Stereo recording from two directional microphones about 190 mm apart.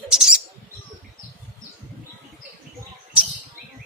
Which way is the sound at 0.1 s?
5° right (ahead or behind).